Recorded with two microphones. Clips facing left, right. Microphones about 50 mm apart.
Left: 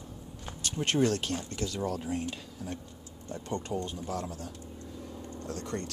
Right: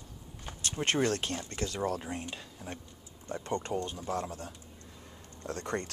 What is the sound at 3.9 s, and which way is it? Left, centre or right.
Speech, right.